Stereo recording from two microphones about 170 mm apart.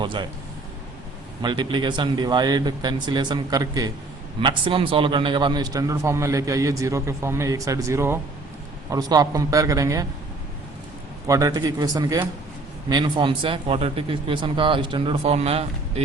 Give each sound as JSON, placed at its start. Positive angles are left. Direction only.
{"t": 0.0, "sound": "a man's voice", "side_deg": -30}
{"t": 1.4, "sound": "a man's voice", "side_deg": -25}
{"t": 11.3, "sound": "a man's voice", "side_deg": -20}